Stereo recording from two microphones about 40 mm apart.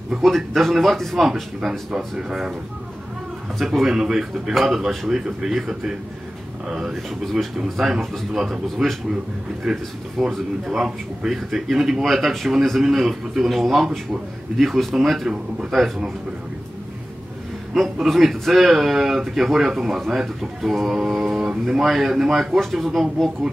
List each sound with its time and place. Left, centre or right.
0.2 s speech: centre
1.2 s a man's voice: centre
3.5 s speech: centre
3.8 s a man's voice: centre
7.8 s a man's voice: centre
18.0 s a man's voice: centre
22.6 s speech: centre